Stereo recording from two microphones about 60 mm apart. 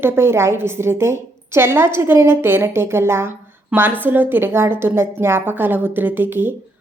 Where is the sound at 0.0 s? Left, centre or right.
Right.